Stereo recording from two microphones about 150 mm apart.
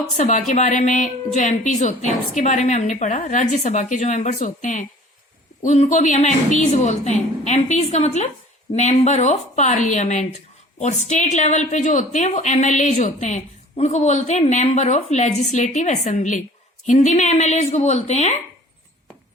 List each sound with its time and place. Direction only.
0.2 s a woman's voice: 50° left (ahead or behind)